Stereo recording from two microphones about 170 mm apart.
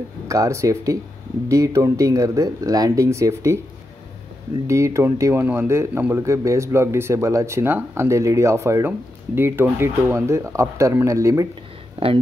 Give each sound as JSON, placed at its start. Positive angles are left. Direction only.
{"t": 0.3, "sound": "speech", "side_deg": -20}
{"t": 4.6, "sound": "speech", "side_deg": -15}
{"t": 12.0, "sound": "speech", "side_deg": -35}